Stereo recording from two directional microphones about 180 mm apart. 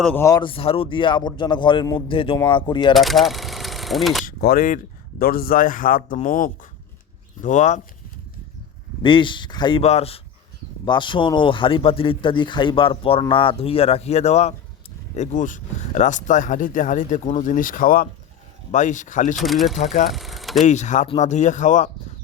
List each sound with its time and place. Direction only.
0.1 s speech: 15° left (ahead or behind)
0.4 s speech: 30° left (ahead or behind)
2.9 s speech: centre (ahead or behind)
4.3 s speech: 55° left (ahead or behind)
9.0 s speech: 25° left (ahead or behind); by 19.4 s 45° left (ahead or behind)
19.4 s speech: centre (ahead or behind)
19.8 s speech: 40° left (ahead or behind)
20.1 s speech: centre (ahead or behind)
20.7 s speech: 40° left (ahead or behind)